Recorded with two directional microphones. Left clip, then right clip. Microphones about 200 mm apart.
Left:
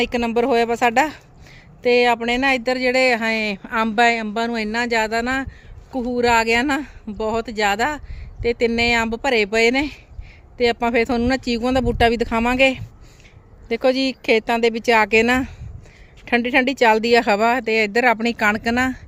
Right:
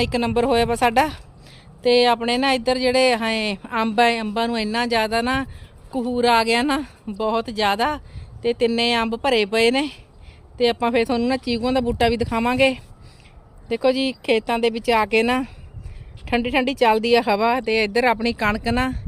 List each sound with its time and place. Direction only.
0.0 s speech: 10° left (ahead or behind)